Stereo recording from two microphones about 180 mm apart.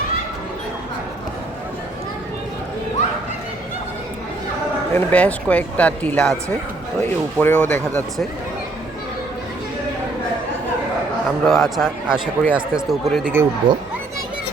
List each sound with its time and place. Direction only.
4.9 s speech: 5° left (ahead or behind)
7.3 s speech: 10° left (ahead or behind)
11.4 s speech: centre (ahead or behind)
13.6 s speech: 50° right (ahead or behind)